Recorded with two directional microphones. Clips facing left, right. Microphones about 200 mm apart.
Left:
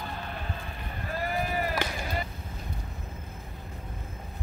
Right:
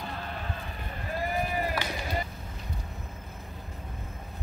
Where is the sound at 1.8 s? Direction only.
50° left (ahead or behind).